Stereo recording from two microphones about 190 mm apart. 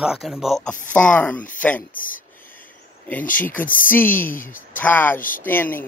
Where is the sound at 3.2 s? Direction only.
45° left (ahead or behind).